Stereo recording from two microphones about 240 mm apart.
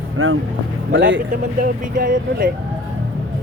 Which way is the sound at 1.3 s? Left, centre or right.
Right.